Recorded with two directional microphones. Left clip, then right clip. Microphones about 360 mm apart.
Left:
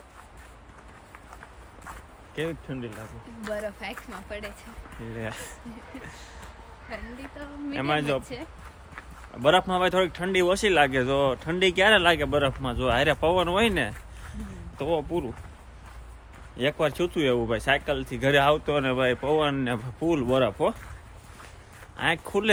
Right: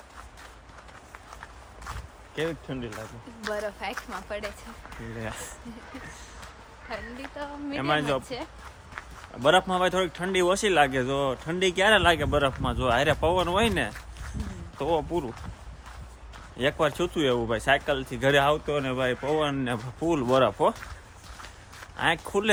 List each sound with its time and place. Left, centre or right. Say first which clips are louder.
2.3 s speech: right 1 dB; centre
6.9 s speech: right 3 dB; centre
16.6 s speech: even; centre
21.9 s speech: even; centre